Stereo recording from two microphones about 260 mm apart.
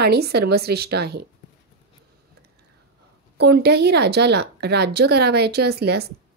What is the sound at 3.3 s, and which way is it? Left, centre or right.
Speech, right.